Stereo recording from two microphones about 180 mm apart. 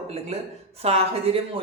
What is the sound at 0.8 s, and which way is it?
Speech, 35° right (ahead or behind).